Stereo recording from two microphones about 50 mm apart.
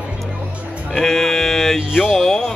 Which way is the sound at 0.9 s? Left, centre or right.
Centre.